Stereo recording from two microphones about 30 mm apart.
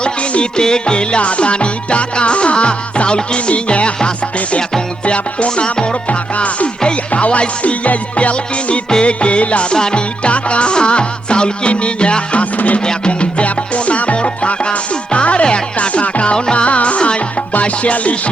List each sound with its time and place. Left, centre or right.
0.0 s music: left
0.5 s music: left
6.1 s music: left
15.9 s music: left
16.2 s music: left
16.6 s music: left